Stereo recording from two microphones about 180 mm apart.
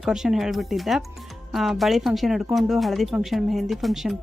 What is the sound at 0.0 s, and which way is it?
Speech, 5° right (ahead or behind).